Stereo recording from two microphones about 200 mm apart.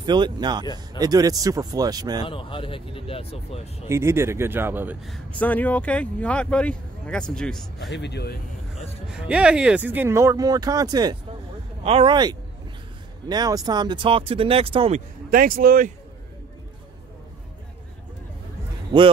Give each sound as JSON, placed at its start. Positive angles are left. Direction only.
{"t": 0.0, "sound": "speech", "side_deg": -20}
{"t": 2.2, "sound": "speech", "side_deg": 25}
{"t": 3.9, "sound": "speech", "side_deg": -15}
{"t": 5.0, "sound": "speech", "side_deg": 5}
{"t": 7.9, "sound": "speech", "side_deg": 60}
{"t": 9.1, "sound": "speech", "side_deg": -5}
{"t": 15.2, "sound": "speech", "side_deg": -45}